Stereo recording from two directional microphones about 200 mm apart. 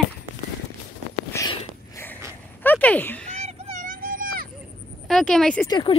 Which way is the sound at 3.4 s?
35° right (ahead or behind).